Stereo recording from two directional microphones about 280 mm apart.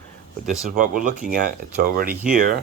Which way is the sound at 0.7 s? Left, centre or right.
Right.